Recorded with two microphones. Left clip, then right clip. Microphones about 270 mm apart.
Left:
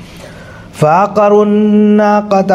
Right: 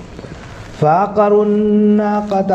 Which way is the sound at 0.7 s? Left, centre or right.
Left.